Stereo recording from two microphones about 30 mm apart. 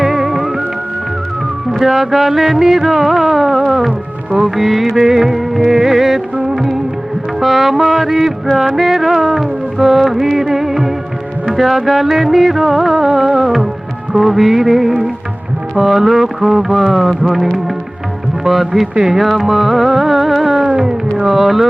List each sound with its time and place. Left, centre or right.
0.0 s music: centre
1.8 s music: centre
20.7 s music: right
21.2 s music: centre